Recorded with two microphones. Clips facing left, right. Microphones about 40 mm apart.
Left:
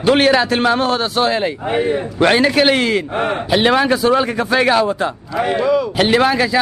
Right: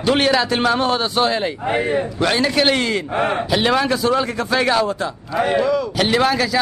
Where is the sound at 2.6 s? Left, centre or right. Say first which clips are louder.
Left 3 dB; centre.